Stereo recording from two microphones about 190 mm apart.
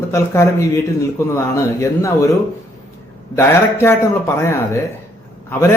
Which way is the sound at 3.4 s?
15° left (ahead or behind).